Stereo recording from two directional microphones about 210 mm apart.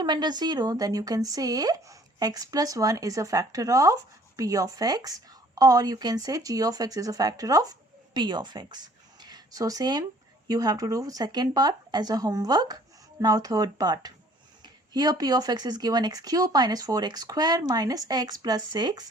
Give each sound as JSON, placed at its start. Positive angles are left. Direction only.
{"t": 0.0, "sound": "a woman's voice", "side_deg": -20}